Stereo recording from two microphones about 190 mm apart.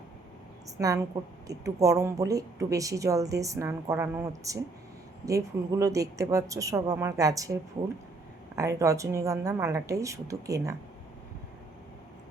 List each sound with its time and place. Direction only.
0.8 s speech: 15° right (ahead or behind)
8.5 s speech: 15° right (ahead or behind)